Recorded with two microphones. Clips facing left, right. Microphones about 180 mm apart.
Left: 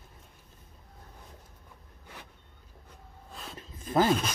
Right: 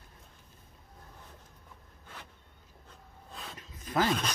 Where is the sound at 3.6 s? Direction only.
30° left (ahead or behind).